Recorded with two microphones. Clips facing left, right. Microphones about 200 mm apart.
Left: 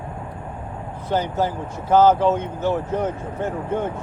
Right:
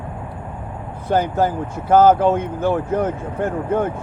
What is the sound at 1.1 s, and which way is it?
Speech, 55° right (ahead or behind).